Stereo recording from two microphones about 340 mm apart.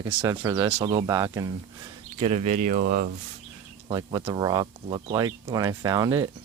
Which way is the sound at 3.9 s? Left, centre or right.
Centre.